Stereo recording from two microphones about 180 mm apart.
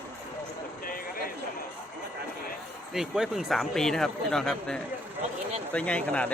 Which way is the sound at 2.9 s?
5° right (ahead or behind).